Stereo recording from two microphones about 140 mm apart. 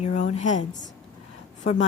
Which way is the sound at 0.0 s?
55° left (ahead or behind).